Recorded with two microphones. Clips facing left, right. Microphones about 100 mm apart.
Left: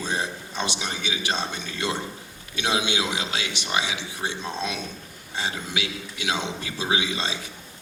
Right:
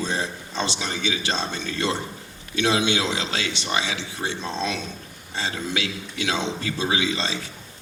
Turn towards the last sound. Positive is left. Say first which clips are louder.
# right 2 dB
turn(degrees=15)  # may be behind; listen again after turning